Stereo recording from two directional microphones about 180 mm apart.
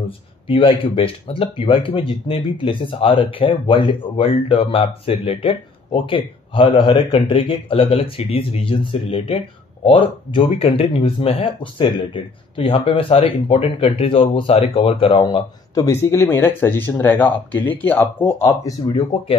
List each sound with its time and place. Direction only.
0.5 s speech: 30° left (ahead or behind)
15.7 s speech: 15° left (ahead or behind)